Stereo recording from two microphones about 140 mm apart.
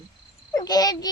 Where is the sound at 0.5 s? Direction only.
30° left (ahead or behind).